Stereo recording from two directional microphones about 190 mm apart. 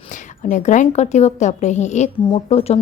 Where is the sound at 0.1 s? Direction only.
40° left (ahead or behind).